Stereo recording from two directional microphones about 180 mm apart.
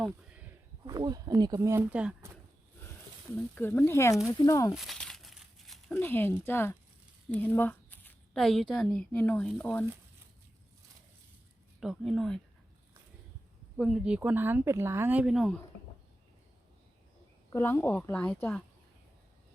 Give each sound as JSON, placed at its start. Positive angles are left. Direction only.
{"t": 0.9, "sound": "speech", "side_deg": -20}
{"t": 3.5, "sound": "speech", "side_deg": 10}
{"t": 4.7, "sound": "crumpling", "side_deg": 0}
{"t": 7.3, "sound": "speech", "side_deg": 10}
{"t": 11.8, "sound": "speech", "side_deg": 0}
{"t": 13.7, "sound": "speech", "side_deg": 0}
{"t": 17.5, "sound": "speech", "side_deg": 15}